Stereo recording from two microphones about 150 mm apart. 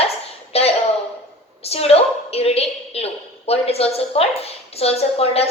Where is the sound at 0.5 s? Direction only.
45° left (ahead or behind).